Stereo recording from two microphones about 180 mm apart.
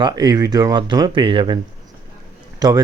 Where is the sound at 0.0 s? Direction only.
20° right (ahead or behind).